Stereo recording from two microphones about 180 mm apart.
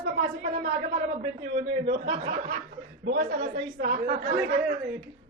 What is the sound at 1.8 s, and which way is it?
Speech, 40° right (ahead or behind).